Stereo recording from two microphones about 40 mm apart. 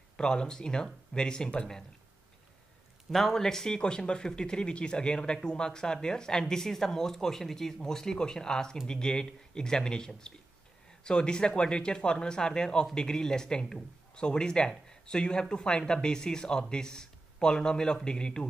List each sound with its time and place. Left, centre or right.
0.2 s a man's voice: centre
3.1 s a man's voice: centre